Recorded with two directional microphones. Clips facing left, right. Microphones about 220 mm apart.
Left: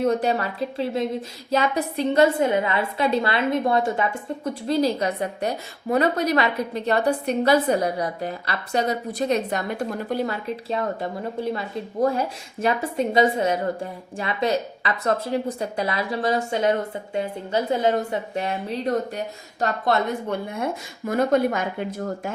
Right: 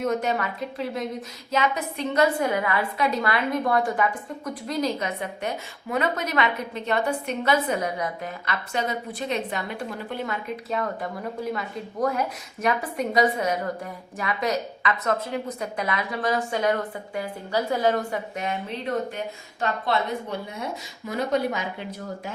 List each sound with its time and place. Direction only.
0.0 s a woman's voice: 30° left (ahead or behind); by 22.3 s 50° left (ahead or behind)